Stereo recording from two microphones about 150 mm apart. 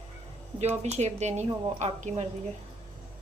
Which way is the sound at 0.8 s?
45° right (ahead or behind).